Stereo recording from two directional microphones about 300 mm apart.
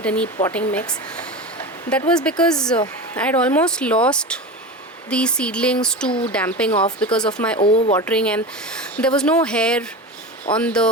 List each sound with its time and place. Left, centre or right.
0.0 s speech: centre
6.1 s speech: centre
6.3 s speech: centre
7.6 s speech: centre
8.0 s speech: centre